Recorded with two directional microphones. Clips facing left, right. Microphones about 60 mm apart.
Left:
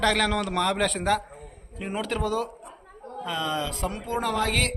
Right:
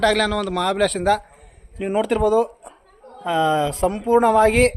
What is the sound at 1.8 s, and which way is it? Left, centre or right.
Speech, centre.